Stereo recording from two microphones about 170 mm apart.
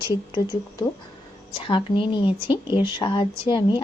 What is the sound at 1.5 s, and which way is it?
Speech, 30° left (ahead or behind).